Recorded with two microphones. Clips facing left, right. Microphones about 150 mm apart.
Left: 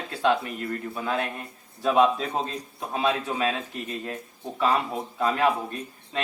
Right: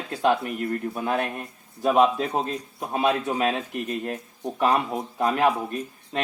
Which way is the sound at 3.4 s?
55° right (ahead or behind).